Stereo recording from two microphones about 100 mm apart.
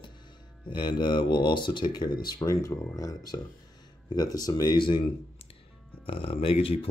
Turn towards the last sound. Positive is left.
turn(degrees=70)  # may be behind; listen again after turning